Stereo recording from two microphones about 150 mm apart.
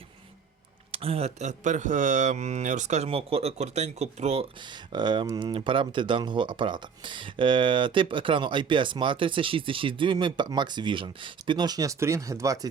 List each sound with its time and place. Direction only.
0.9 s speech: 40° right (ahead or behind)
4.9 s speech: 30° right (ahead or behind)